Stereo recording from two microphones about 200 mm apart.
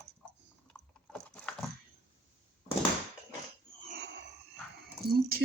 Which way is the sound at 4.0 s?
60° right (ahead or behind).